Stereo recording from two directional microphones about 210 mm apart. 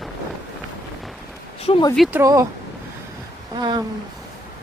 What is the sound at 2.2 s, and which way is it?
Speech, 15° right (ahead or behind).